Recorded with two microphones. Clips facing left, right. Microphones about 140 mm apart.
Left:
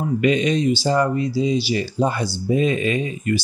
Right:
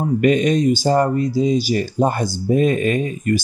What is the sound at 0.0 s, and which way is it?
Speech, 50° right (ahead or behind).